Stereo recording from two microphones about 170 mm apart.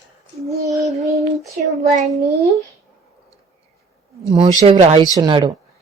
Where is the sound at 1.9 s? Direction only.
45° right (ahead or behind).